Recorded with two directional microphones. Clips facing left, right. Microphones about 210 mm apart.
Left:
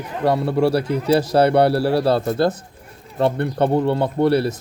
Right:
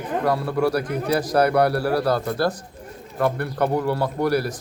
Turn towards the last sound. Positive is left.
turn(degrees=25)  # may be behind; listen again after turning